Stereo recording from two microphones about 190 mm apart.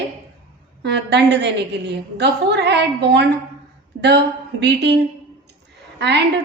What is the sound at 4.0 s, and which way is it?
Speech, 65° right (ahead or behind).